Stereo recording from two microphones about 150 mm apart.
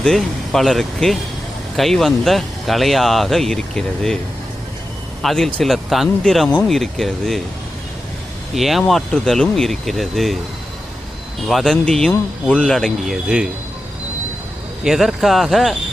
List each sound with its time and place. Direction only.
0.0 s speech: centre (ahead or behind)
5.2 s speech: centre (ahead or behind)
8.5 s speech: centre (ahead or behind)
11.4 s speech: centre (ahead or behind)
14.8 s speech: centre (ahead or behind)